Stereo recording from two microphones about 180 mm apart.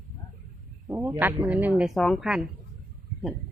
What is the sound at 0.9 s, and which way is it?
Speech, 10° right (ahead or behind).